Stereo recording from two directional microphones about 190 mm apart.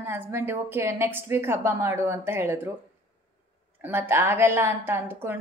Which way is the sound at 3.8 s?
10° right (ahead or behind).